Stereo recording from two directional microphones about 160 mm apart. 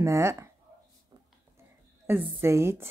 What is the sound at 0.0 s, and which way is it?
Speech, 15° right (ahead or behind).